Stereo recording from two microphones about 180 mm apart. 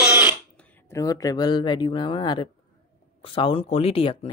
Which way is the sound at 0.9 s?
20° left (ahead or behind).